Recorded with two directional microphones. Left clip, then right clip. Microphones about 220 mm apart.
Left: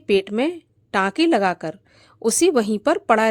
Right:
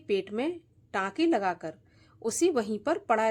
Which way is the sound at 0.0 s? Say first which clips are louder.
Left 10 dB; 40° left (ahead or behind).